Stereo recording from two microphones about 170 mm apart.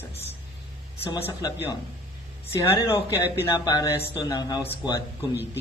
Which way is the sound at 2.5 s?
15° left (ahead or behind).